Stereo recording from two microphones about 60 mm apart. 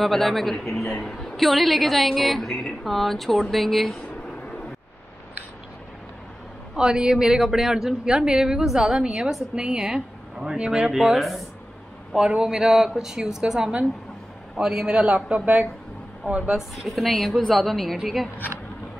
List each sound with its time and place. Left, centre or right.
0.0 s a woman's voice: centre
6.8 s speech: centre
12.3 s a man's voice: centre
16.5 s a woman's voice: centre